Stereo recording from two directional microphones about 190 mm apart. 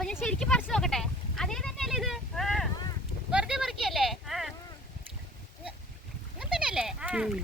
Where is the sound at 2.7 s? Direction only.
20° left (ahead or behind).